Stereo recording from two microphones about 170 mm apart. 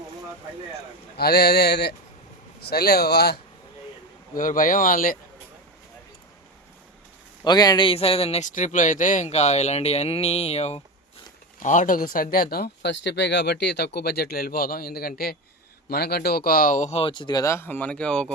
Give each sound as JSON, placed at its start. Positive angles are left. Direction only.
{"t": 1.1, "sound": "speech", "side_deg": 70}
{"t": 4.4, "sound": "speech", "side_deg": 50}
{"t": 7.4, "sound": "speech", "side_deg": 25}